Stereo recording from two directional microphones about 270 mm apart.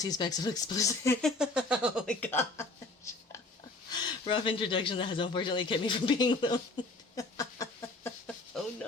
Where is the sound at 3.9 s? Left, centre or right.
Centre.